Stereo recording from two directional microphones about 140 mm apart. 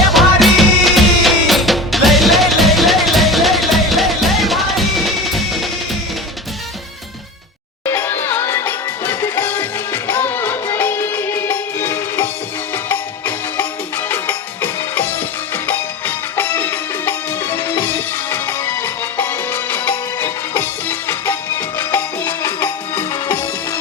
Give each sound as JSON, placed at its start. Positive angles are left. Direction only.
{"t": 0.0, "sound": "music", "side_deg": 0}
{"t": 7.9, "sound": "music", "side_deg": 15}